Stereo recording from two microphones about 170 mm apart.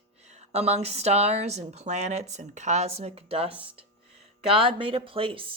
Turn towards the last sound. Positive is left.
turn(degrees=-30)  # may be behind; listen again after turning